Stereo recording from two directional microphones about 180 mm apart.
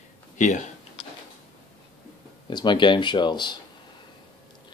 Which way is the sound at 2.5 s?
25° left (ahead or behind).